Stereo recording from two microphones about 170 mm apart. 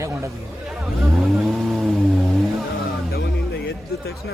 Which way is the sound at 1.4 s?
Centre (ahead or behind).